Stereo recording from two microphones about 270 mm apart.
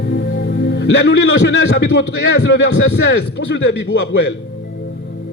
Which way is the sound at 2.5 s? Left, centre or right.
Left.